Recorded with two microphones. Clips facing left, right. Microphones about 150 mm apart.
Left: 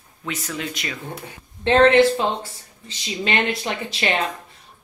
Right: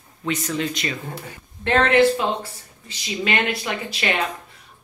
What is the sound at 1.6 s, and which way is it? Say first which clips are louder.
A woman's voice: left 3 dB; 25° left (ahead or behind).